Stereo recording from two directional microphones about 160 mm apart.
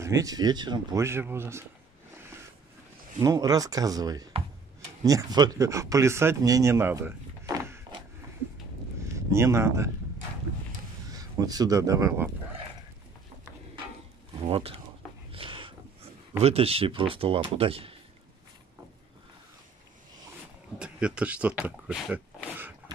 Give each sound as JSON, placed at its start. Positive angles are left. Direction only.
{"t": 0.0, "sound": "speech", "side_deg": -20}
{"t": 3.2, "sound": "speech", "side_deg": -20}
{"t": 9.3, "sound": "speech", "side_deg": -15}
{"t": 11.1, "sound": "speech", "side_deg": -25}
{"t": 14.4, "sound": "speech", "side_deg": -40}
{"t": 15.3, "sound": "a sound", "side_deg": -35}
{"t": 20.8, "sound": "speech", "side_deg": -5}